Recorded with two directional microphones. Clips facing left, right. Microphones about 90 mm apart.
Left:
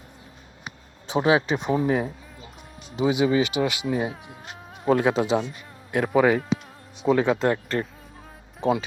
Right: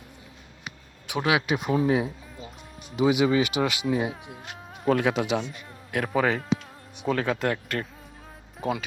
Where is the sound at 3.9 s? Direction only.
35° left (ahead or behind).